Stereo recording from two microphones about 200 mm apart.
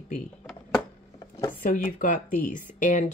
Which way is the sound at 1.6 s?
40° left (ahead or behind).